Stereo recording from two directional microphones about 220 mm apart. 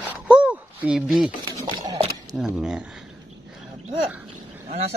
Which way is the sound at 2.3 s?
5° right (ahead or behind).